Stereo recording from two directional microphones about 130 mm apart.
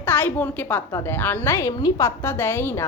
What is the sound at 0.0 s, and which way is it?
A woman's voice, 15° left (ahead or behind).